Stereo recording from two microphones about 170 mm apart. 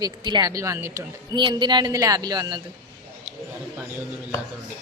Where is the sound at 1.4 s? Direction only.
30° right (ahead or behind).